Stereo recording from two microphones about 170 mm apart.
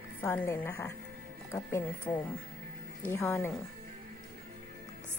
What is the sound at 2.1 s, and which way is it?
A woman's voice, 15° left (ahead or behind).